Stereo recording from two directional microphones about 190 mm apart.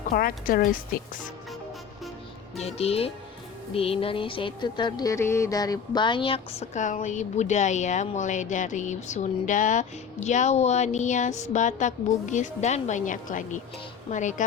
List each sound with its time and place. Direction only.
0.1 s a woman's voice: 50° left (ahead or behind)
2.6 s speech: 35° left (ahead or behind)